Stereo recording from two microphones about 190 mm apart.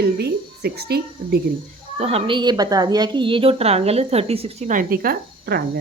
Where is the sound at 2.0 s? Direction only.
30° right (ahead or behind); by 5.6 s 55° right (ahead or behind).